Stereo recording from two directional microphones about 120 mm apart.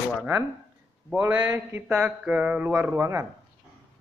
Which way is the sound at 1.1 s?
15° right (ahead or behind).